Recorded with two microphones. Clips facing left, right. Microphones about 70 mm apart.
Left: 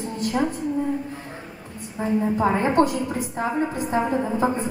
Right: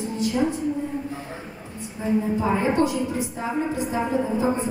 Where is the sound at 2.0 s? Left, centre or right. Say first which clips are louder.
Left 2 dB; left.